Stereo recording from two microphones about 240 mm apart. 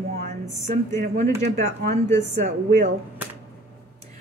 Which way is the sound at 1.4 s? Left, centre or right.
Right.